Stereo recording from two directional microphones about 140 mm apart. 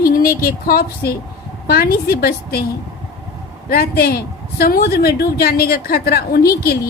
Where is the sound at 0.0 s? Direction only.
90° left.